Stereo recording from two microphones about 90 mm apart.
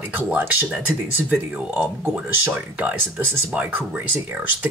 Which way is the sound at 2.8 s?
15° right (ahead or behind).